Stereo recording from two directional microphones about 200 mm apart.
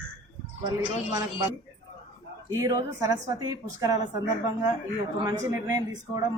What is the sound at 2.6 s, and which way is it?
A man's voice, 15° right (ahead or behind).